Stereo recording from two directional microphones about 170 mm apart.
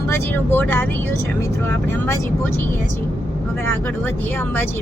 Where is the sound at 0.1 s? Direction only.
10° left (ahead or behind).